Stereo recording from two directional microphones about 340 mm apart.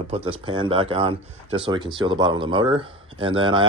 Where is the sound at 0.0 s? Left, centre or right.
Centre.